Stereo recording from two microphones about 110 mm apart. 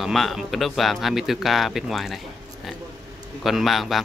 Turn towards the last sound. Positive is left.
turn(degrees=0)  # may be behind; listen again after turning